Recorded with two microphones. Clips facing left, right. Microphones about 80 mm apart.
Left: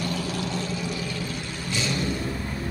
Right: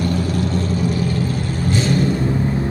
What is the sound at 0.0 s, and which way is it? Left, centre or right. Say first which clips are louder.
Vehicle: right 8 dB; right.